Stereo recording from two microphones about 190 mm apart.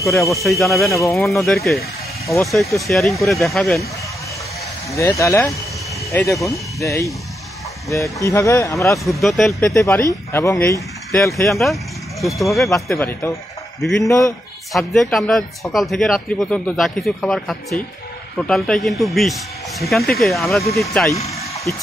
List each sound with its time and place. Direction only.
0.1 s speech: centre (ahead or behind)
4.9 s speech: 15° left (ahead or behind)
9.2 s speech: centre (ahead or behind)
9.6 s speech: 15° left (ahead or behind)
11.4 s speech: centre (ahead or behind)
12.9 s speech: 10° left (ahead or behind)
13.7 s speech: centre (ahead or behind)
14.0 s speech: 15° left (ahead or behind)
14.7 s speech: centre (ahead or behind)